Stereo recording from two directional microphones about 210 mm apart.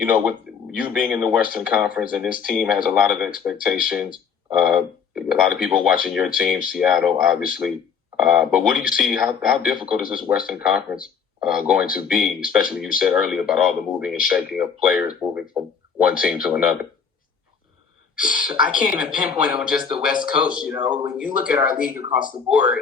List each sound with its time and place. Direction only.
0.0 s speech: 5° right (ahead or behind)
18.3 s speech: 5° right (ahead or behind)